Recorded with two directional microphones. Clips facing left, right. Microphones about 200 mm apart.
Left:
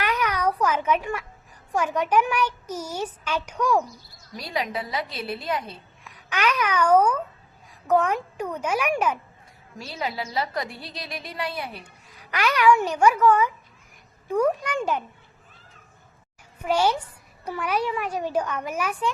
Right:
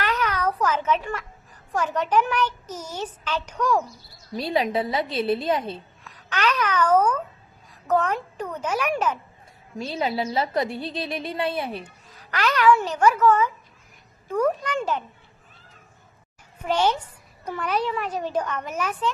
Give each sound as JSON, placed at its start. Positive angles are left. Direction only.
{"t": 0.0, "sound": "a sound", "side_deg": 10}
{"t": 1.7, "sound": "a woman's voice", "side_deg": 10}
{"t": 4.4, "sound": "a woman's voice", "side_deg": -25}
{"t": 6.1, "sound": "babbling", "side_deg": 10}
{"t": 7.9, "sound": "a woman's voice", "side_deg": 10}
{"t": 9.7, "sound": "a woman's voice", "side_deg": -25}
{"t": 12.0, "sound": "a woman's voice", "side_deg": 10}
{"t": 16.6, "sound": "a woman's voice", "side_deg": 10}